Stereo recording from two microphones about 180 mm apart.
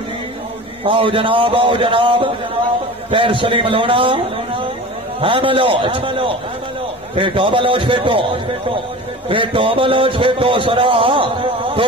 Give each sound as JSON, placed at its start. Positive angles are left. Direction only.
{"t": 0.8, "sound": "a man's voice", "side_deg": -30}
{"t": 9.3, "sound": "a man's voice", "side_deg": -30}